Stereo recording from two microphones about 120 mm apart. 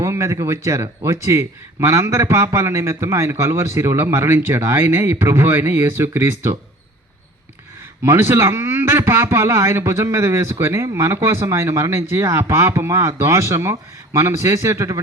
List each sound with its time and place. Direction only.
0.0 s speech: 25° right (ahead or behind)
8.0 s speech: 20° right (ahead or behind)